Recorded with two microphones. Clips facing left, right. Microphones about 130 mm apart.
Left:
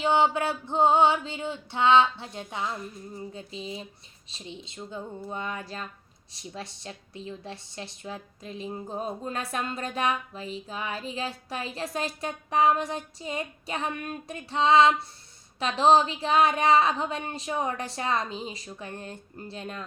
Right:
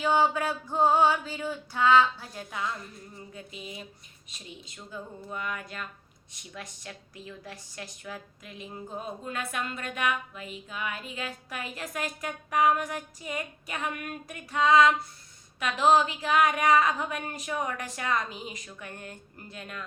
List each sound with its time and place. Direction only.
0.0 s a woman's voice: 25° left (ahead or behind)